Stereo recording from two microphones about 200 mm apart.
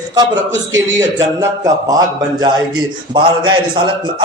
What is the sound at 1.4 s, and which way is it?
A man's voice, 15° right (ahead or behind).